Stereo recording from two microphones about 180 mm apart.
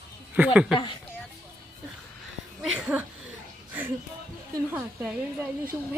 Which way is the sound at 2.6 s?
10° right (ahead or behind).